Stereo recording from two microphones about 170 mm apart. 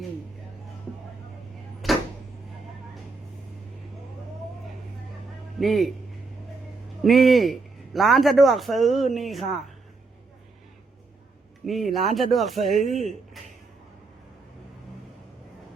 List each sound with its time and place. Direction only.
1.8 s a sound: centre (ahead or behind)
5.5 s a man's voice: centre (ahead or behind)
7.0 s a man's voice: centre (ahead or behind)
11.6 s a man's voice: centre (ahead or behind)